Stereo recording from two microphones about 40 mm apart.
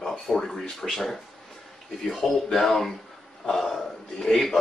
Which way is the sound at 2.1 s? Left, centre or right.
Centre.